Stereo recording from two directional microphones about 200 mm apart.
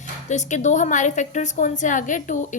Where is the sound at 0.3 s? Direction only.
35° left (ahead or behind).